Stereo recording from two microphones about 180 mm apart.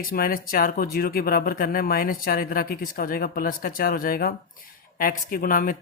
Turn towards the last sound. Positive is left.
turn(degrees=50)  # may be behind; listen again after turning